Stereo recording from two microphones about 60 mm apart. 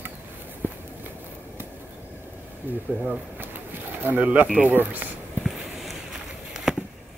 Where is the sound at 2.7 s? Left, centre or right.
Right.